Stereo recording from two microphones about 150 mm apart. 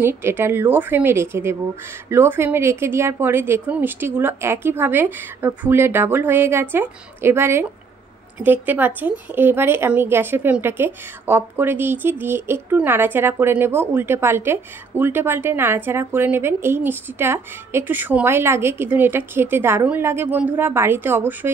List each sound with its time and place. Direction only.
0.0 s a woman's voice: 15° right (ahead or behind)